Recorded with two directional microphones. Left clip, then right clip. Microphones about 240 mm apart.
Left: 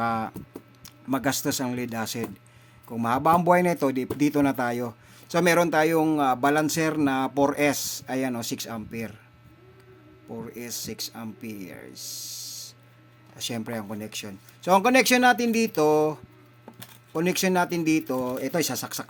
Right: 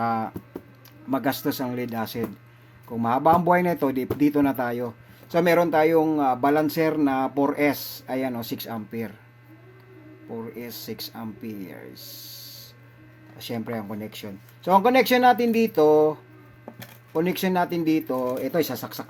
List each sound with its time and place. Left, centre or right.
0.0 s speech: centre
10.2 s speech: left
17.2 s speech: left